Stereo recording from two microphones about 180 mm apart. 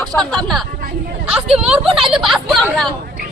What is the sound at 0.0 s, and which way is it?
Speech, 5° left (ahead or behind).